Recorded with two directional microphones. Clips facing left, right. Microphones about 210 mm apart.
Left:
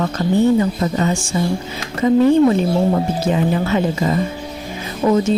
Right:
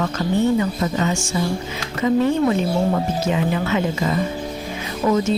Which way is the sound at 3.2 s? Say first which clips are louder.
Left 3 dB; 35° left (ahead or behind).